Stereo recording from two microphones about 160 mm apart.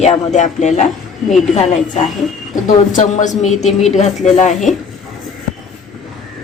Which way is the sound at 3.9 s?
45° left (ahead or behind).